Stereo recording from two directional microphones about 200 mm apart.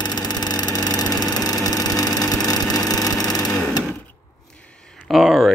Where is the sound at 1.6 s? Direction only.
20° left (ahead or behind).